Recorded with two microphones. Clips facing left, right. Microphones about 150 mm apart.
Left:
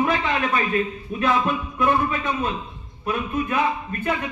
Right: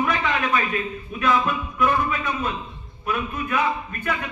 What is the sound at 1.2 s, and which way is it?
A man's voice, 30° left (ahead or behind).